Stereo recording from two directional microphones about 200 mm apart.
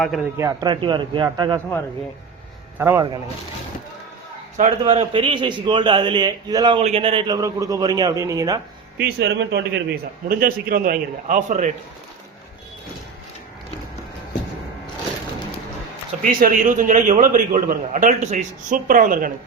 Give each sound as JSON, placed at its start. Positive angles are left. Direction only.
{"t": 0.0, "sound": "a man's voice", "side_deg": 0}
{"t": 0.3, "sound": "a man's voice", "side_deg": -20}
{"t": 2.7, "sound": "speech", "side_deg": -10}
{"t": 4.5, "sound": "a man's voice", "side_deg": -30}
{"t": 9.0, "sound": "a man's voice", "side_deg": -55}
{"t": 10.2, "sound": "a man's voice", "side_deg": -45}
{"t": 16.3, "sound": "a man's voice", "side_deg": -45}